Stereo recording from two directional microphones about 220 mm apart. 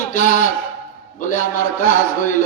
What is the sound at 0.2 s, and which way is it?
Speech, 35° left (ahead or behind).